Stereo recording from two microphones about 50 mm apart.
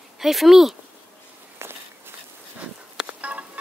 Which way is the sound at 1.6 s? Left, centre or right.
Right.